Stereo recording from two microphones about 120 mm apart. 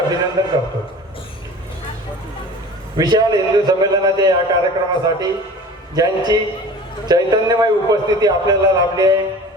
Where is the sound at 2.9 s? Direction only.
35° right (ahead or behind).